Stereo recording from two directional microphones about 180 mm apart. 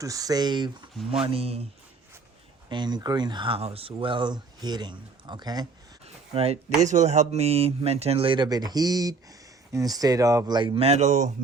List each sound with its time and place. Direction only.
0.0 s speech: 20° right (ahead or behind)
2.6 s speech: 25° right (ahead or behind)
6.3 s speech: 35° right (ahead or behind)